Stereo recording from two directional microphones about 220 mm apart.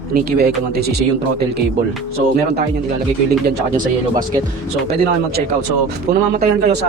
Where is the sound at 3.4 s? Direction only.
40° right (ahead or behind).